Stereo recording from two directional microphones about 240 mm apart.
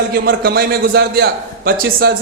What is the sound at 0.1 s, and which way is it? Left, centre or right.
A man's voice, right.